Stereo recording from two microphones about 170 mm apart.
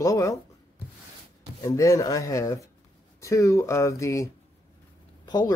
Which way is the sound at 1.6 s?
20° left (ahead or behind).